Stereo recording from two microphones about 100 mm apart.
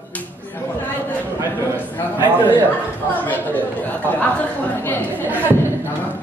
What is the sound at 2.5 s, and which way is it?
Speech, 15° left (ahead or behind).